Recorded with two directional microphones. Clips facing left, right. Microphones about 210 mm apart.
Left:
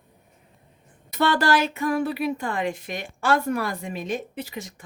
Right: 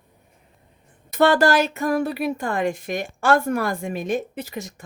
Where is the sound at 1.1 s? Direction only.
50° right (ahead or behind).